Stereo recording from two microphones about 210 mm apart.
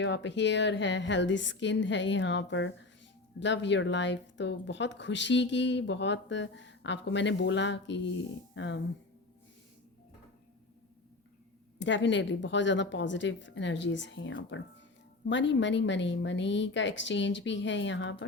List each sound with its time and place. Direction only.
0.0 s speech: 60° left (ahead or behind)
11.8 s speech: 60° left (ahead or behind)